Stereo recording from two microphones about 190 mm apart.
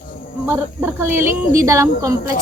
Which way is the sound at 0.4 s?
10° right (ahead or behind).